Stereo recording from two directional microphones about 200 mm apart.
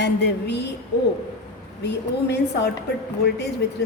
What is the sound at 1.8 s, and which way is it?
Speech, 60° left (ahead or behind).